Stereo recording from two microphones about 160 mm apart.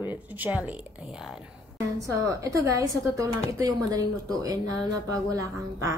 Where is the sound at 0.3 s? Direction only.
10° right (ahead or behind).